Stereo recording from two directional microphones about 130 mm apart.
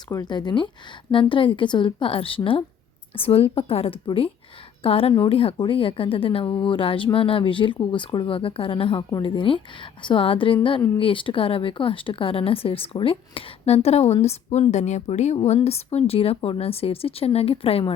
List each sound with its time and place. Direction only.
0.1 s a woman's voice: 30° left (ahead or behind); by 15.4 s 65° left (ahead or behind)
15.4 s a woman's voice: 50° left (ahead or behind)